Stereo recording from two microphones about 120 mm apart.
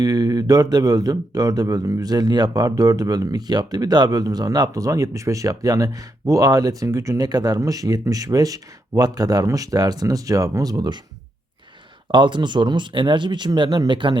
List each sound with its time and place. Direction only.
0.0 s speech: 30° right (ahead or behind)
12.1 s speech: 40° right (ahead or behind)